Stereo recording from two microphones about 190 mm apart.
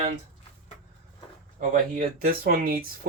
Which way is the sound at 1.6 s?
45° right (ahead or behind).